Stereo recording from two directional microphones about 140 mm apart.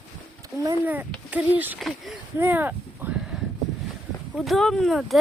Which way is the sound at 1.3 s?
10° right (ahead or behind).